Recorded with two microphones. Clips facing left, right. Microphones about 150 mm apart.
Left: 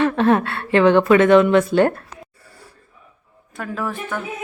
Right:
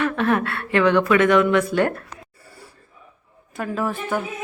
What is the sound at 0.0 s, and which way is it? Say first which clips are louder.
A woman's voice: left 4 dB; 30° left (ahead or behind).